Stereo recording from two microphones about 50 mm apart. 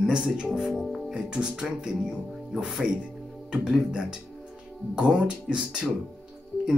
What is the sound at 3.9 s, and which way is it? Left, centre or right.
Speech, centre.